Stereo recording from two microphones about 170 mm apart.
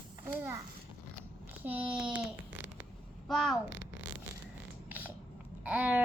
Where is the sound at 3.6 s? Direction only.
90° right.